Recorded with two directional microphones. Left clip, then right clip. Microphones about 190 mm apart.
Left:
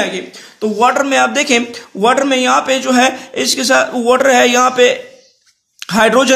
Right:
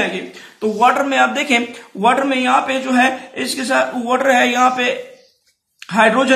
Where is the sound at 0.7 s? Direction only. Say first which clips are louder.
Left 2 dB; 40° left (ahead or behind).